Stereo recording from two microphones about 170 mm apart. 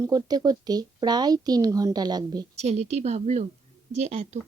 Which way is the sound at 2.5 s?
40° right (ahead or behind).